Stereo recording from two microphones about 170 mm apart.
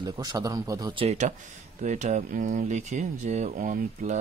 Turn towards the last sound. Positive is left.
turn(degrees=-50)  # may be behind; listen again after turning